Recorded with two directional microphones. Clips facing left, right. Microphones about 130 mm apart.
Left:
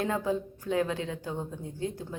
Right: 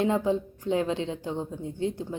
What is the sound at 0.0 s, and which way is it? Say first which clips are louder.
A woman's voice: right 4 dB; 20° right (ahead or behind).